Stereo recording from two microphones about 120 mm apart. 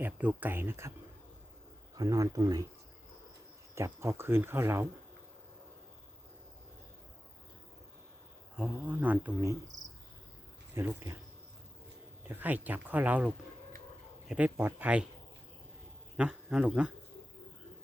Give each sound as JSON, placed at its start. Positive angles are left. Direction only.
{"t": 0.0, "sound": "speech", "side_deg": -15}
{"t": 2.0, "sound": "speech", "side_deg": -30}
{"t": 3.8, "sound": "speech", "side_deg": -25}
{"t": 8.5, "sound": "speech", "side_deg": -15}
{"t": 10.8, "sound": "speech", "side_deg": -20}
{"t": 12.3, "sound": "speech", "side_deg": -15}
{"t": 16.1, "sound": "a man's voice", "side_deg": -10}